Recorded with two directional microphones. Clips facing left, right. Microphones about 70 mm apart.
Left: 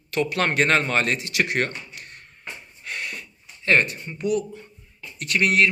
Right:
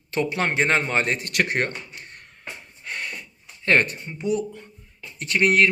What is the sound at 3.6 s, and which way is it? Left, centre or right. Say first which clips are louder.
Speech: even; right.